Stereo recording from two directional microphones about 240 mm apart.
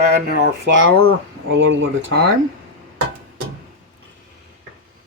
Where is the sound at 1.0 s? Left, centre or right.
Right.